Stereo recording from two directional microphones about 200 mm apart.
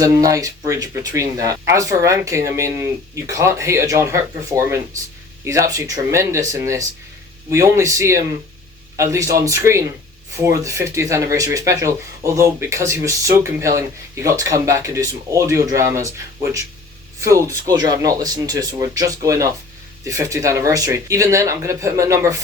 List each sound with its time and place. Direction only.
0.0 s speech: 15° right (ahead or behind)